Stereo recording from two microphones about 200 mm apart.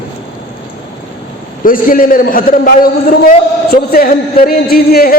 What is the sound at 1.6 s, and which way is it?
A man's voice, 45° left (ahead or behind).